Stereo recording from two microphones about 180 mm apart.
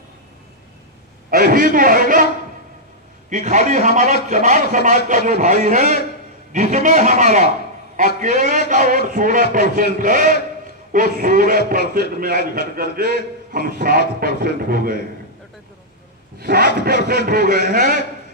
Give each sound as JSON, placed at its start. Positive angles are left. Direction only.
{"t": 1.3, "sound": "a man's voice", "side_deg": -50}
{"t": 3.3, "sound": "a man's voice", "side_deg": -45}
{"t": 16.3, "sound": "a man's voice", "side_deg": -55}